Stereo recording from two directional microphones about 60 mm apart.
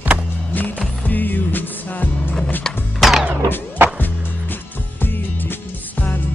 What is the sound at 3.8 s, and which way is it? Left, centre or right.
Music, right.